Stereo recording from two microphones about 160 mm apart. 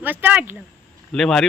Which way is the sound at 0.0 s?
10° right (ahead or behind).